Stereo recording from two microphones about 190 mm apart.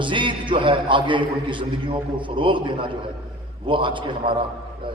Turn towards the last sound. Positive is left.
turn(degrees=-25)  # may be behind; listen again after turning